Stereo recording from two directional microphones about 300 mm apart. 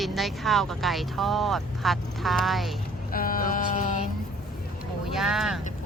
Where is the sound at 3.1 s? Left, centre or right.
Left.